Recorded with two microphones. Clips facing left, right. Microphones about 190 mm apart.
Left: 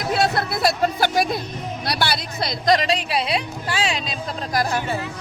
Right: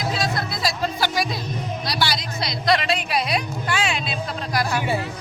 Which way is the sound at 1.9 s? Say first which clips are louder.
Left 2 dB; 55° left (ahead or behind).